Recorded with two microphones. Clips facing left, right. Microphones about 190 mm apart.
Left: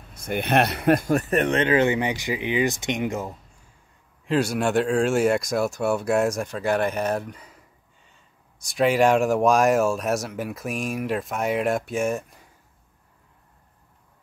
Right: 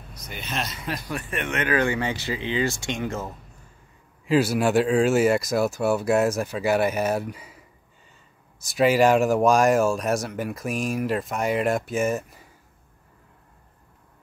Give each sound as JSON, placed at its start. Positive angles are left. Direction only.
{"t": 0.2, "sound": "speech", "side_deg": 60}
{"t": 4.3, "sound": "speech", "side_deg": -5}